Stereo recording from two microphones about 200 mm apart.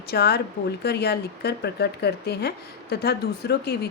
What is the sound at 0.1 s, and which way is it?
A woman's voice, 50° left (ahead or behind).